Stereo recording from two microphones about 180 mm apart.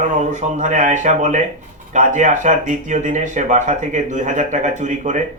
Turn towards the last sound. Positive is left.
turn(degrees=-45)  # may be behind; listen again after turning